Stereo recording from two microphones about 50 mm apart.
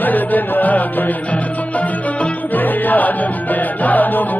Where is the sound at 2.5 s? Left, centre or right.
Left.